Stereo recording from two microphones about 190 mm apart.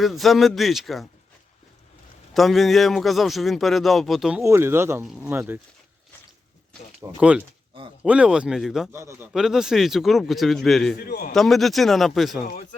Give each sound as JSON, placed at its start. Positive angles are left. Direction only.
{"t": 0.0, "sound": "a man's voice", "side_deg": 0}
{"t": 2.3, "sound": "a man's voice", "side_deg": 0}
{"t": 4.4, "sound": "speech", "side_deg": -10}
{"t": 7.2, "sound": "a man's voice", "side_deg": -5}
{"t": 8.9, "sound": "a man's voice", "side_deg": -15}
{"t": 11.0, "sound": "a man's voice", "side_deg": 55}
{"t": 11.3, "sound": "a man's voice", "side_deg": 0}